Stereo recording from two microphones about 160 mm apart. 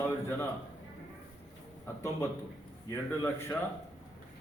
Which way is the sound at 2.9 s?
15° left (ahead or behind).